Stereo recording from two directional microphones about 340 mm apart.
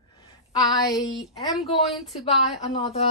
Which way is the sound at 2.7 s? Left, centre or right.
Centre.